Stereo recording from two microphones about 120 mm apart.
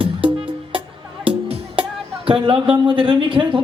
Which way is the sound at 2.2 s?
50° right (ahead or behind).